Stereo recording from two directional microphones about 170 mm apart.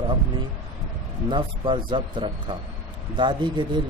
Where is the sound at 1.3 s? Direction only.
25° right (ahead or behind).